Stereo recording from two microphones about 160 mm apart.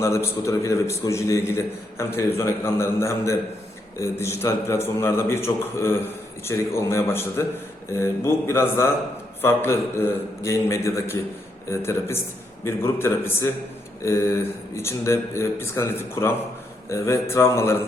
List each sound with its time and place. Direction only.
0.0 s speech: 15° left (ahead or behind)